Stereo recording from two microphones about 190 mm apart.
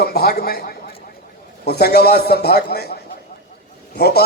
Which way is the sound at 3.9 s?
55° left (ahead or behind).